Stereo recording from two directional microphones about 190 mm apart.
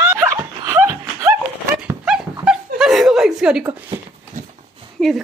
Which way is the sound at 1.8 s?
5° right (ahead or behind).